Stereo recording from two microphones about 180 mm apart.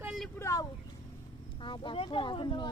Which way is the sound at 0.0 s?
5° right (ahead or behind).